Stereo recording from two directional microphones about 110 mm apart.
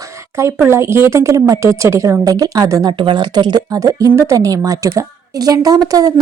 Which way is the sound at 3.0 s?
45° right (ahead or behind).